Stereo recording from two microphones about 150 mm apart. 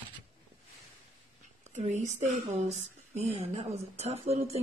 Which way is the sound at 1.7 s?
50° right (ahead or behind).